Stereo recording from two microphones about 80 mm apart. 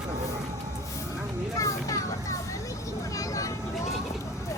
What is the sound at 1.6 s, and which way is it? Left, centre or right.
Children playing, left.